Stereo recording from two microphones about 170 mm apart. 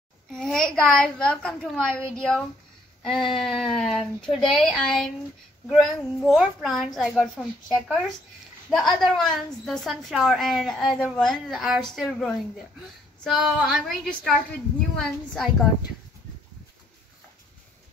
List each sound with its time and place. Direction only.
0.3 s a woman's voice: 5° left (ahead or behind)